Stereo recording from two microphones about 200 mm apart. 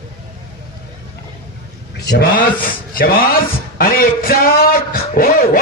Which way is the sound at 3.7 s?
45° left (ahead or behind).